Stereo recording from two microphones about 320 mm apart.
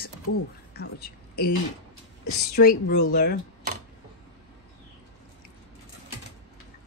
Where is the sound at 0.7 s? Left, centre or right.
Left.